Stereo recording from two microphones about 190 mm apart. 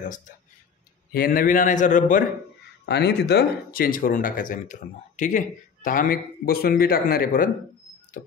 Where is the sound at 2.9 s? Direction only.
60° left (ahead or behind).